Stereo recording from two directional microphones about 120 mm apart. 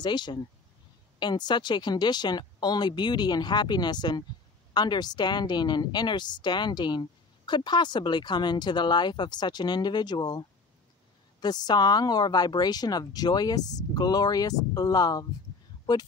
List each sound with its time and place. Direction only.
0.0 s a woman's voice: 40° left (ahead or behind)
11.4 s a woman's voice: 35° left (ahead or behind)